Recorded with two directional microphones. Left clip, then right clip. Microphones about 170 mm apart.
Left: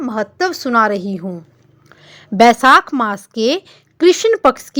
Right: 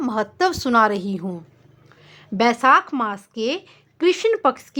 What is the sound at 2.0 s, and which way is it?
A woman's voice, 30° left (ahead or behind).